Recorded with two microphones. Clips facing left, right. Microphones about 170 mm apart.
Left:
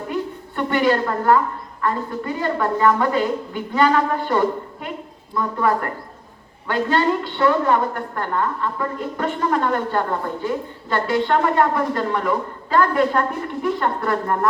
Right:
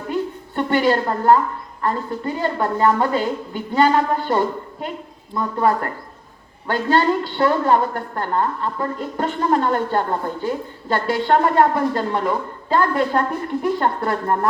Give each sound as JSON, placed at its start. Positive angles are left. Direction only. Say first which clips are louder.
{"t": 0.1, "sound": "music", "louder": "right 4 dB", "side_deg": -30}
{"t": 1.8, "sound": "a woman's voice", "louder": "right 1 dB", "side_deg": -30}